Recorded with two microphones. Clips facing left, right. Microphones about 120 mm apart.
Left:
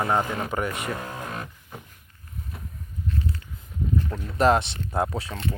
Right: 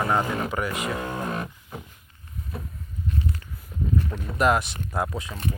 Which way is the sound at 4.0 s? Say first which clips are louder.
Left 2 dB; 25° left (ahead or behind).